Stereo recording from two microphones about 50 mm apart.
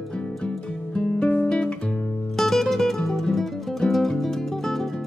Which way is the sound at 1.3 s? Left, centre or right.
Left.